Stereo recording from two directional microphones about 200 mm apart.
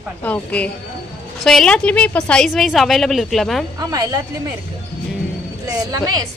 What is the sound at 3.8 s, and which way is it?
Speech, 20° right (ahead or behind).